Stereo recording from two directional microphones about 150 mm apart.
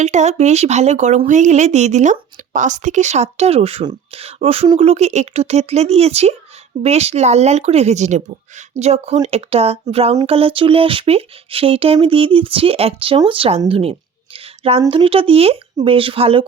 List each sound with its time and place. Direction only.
0.0 s a woman's voice: 50° right (ahead or behind)
14.3 s a sound: 40° right (ahead or behind)
14.8 s speech: 35° right (ahead or behind)